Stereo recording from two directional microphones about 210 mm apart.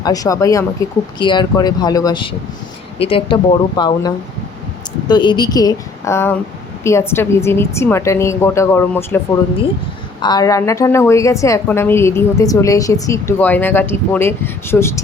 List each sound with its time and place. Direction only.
0.0 s a woman's voice: 15° left (ahead or behind)